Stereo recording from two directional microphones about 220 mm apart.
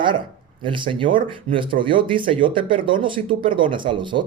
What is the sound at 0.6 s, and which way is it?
Speech, 25° right (ahead or behind).